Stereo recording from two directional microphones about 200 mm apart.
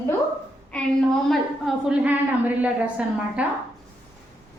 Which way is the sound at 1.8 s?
5° right (ahead or behind).